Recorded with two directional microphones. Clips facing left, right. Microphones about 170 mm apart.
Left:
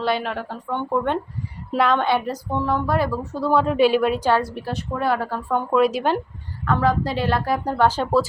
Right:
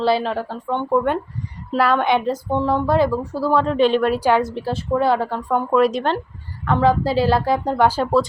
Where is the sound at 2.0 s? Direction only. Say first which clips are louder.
Right 3 dB; 20° right (ahead or behind).